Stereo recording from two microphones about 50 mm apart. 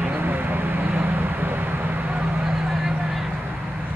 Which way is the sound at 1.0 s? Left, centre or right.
Right.